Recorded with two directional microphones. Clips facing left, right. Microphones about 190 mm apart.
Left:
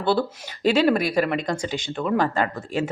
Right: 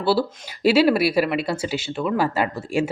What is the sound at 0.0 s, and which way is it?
Speech, 5° right (ahead or behind).